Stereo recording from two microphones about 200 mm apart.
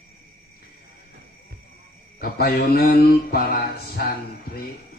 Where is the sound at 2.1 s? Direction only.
50° left (ahead or behind).